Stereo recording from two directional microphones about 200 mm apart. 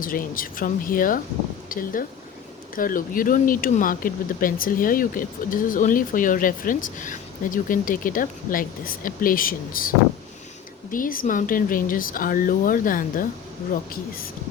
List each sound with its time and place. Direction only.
0.0 s speech: 45° left (ahead or behind)
10.9 s speech: 45° left (ahead or behind)